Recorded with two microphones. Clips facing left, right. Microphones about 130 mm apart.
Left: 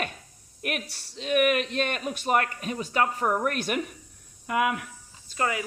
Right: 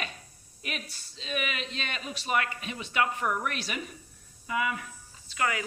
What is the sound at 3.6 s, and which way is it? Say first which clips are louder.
Speech: left 7 dB; 55° left (ahead or behind).